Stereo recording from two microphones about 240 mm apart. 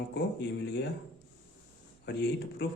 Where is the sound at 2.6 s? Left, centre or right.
Left.